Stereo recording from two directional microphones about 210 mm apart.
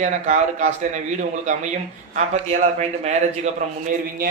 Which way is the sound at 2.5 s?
30° right (ahead or behind).